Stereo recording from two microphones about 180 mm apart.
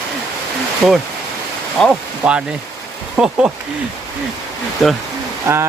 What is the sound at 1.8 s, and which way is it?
Speech, 5° right (ahead or behind).